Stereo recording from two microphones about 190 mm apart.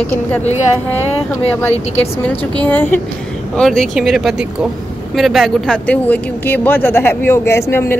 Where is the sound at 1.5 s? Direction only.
10° left (ahead or behind).